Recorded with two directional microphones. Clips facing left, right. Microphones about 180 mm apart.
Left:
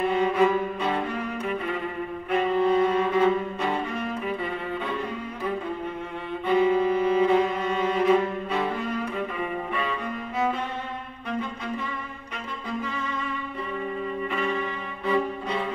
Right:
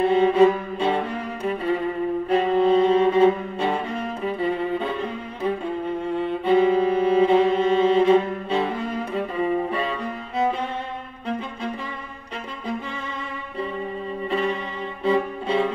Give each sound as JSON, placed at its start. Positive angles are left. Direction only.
{"t": 0.0, "sound": "music", "side_deg": -30}
{"t": 6.4, "sound": "music", "side_deg": -30}
{"t": 15.0, "sound": "music", "side_deg": -30}